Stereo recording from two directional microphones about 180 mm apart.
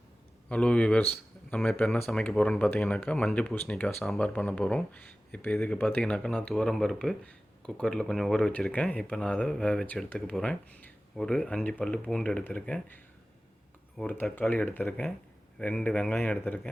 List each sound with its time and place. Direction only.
0.4 s speech: 5° left (ahead or behind)